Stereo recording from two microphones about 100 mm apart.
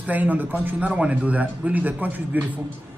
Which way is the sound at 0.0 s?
15° right (ahead or behind).